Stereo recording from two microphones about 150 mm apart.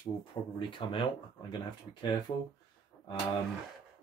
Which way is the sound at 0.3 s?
35° left (ahead or behind).